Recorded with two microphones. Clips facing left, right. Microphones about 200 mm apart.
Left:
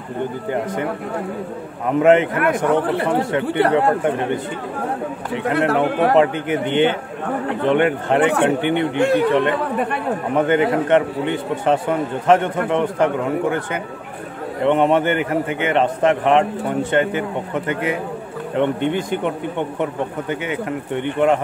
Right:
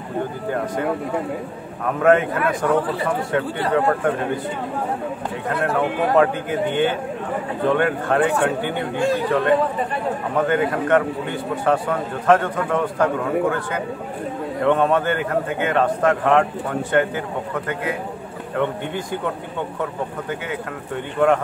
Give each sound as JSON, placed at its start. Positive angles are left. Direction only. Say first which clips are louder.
{"t": 1.9, "sound": "a man's voice", "louder": "left 3 dB", "side_deg": 20}
{"t": 2.3, "sound": "a man's voice", "louder": "left 2 dB", "side_deg": 70}
{"t": 5.5, "sound": "a man's voice", "louder": "left 5 dB", "side_deg": 75}
{"t": 6.1, "sound": "a man's voice", "louder": "left 2 dB", "side_deg": 20}
{"t": 8.2, "sound": "a man's voice", "louder": "left 3 dB", "side_deg": 70}
{"t": 8.5, "sound": "a man's voice", "louder": "left 5 dB", "side_deg": 20}
{"t": 8.9, "sound": "a man's voice", "louder": "left 3 dB", "side_deg": 65}
{"t": 10.3, "sound": "a man's voice", "louder": "left 4 dB", "side_deg": 20}
{"t": 14.6, "sound": "a man's voice", "louder": "left 2 dB", "side_deg": 20}
{"t": 18.6, "sound": "a man's voice", "louder": "left 5 dB", "side_deg": 20}